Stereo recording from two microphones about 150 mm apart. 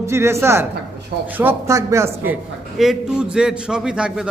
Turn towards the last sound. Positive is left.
turn(degrees=-5)  # may be behind; listen again after turning